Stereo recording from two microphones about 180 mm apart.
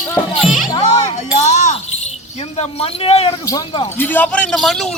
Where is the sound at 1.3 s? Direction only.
40° left (ahead or behind).